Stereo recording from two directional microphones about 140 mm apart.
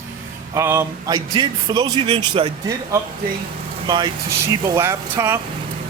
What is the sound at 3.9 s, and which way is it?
Speech, 35° right (ahead or behind).